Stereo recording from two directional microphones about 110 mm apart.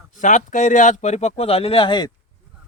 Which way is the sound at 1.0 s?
90° left.